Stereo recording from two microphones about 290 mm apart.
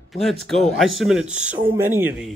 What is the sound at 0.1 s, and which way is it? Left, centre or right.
Speech, centre.